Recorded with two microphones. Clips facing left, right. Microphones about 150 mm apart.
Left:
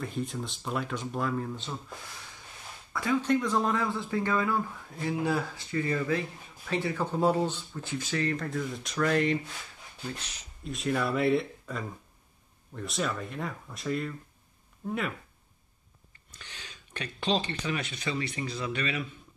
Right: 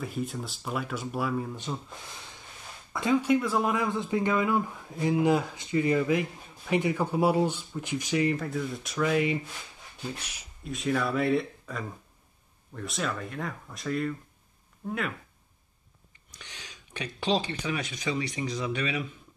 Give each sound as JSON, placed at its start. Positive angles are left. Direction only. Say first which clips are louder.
{"t": 0.0, "sound": "speech", "louder": "right 1 dB", "side_deg": -5}
{"t": 2.9, "sound": "speech", "louder": "right 2 dB", "side_deg": -20}
{"t": 8.5, "sound": "speech", "louder": "right 1 dB", "side_deg": 0}
{"t": 10.7, "sound": "speech", "louder": "right 1 dB", "side_deg": 0}
{"t": 16.3, "sound": "speech", "louder": "right 1 dB", "side_deg": -15}